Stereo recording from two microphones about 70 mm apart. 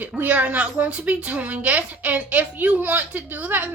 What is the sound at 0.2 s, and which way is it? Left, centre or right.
A woman's voice, right.